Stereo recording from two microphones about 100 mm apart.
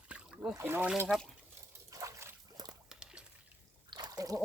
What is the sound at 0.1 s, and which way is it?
Trickle, 5° right (ahead or behind).